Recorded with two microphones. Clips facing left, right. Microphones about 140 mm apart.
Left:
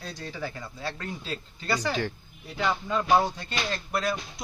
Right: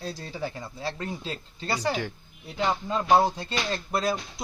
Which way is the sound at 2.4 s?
30° right (ahead or behind).